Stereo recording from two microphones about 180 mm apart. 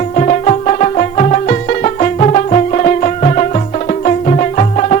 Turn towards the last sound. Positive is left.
turn(degrees=40)  # may be behind; listen again after turning